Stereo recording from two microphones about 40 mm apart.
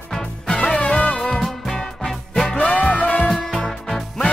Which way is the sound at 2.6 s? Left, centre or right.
Left.